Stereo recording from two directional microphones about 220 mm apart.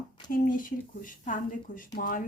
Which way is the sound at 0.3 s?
40° left (ahead or behind).